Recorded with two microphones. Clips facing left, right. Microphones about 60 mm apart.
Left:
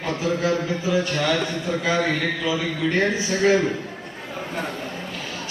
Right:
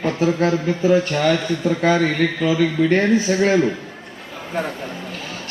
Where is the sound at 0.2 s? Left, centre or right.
Right.